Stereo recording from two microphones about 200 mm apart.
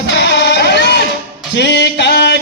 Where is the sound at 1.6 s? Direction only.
55° left (ahead or behind).